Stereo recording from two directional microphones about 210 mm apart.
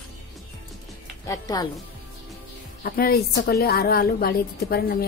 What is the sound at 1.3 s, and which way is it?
Speech, 15° left (ahead or behind).